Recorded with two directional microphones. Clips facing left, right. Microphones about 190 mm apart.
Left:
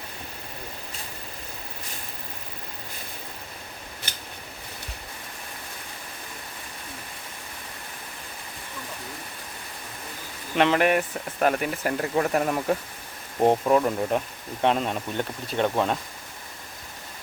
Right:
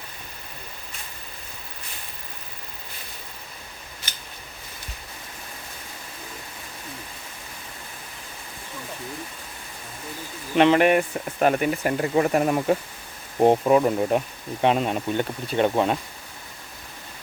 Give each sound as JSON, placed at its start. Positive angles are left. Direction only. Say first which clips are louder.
{"t": 10.6, "sound": "speech", "louder": "right 4 dB", "side_deg": 0}